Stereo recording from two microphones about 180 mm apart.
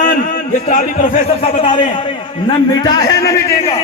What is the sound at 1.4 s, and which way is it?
A man's voice, 30° left (ahead or behind).